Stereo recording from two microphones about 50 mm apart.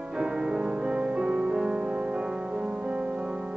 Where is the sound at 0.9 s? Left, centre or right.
Centre.